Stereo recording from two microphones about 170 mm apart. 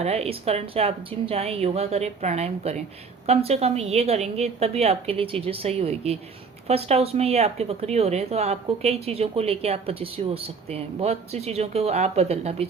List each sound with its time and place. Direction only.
0.0 s speech: 40° right (ahead or behind)